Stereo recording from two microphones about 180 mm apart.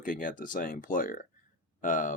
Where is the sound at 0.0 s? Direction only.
45° left (ahead or behind).